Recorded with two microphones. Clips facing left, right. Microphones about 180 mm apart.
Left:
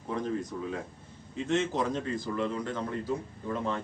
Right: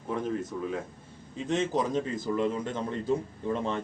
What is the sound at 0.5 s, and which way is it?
Speech, centre (ahead or behind).